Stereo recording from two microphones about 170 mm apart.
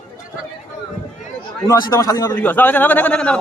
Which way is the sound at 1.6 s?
20° left (ahead or behind).